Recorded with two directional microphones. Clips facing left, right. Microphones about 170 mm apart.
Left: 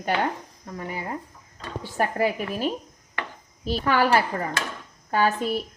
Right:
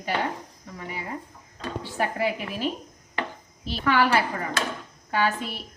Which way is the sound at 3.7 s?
40° left (ahead or behind).